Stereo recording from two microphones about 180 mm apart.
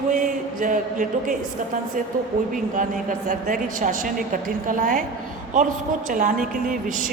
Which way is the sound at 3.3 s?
50° right (ahead or behind).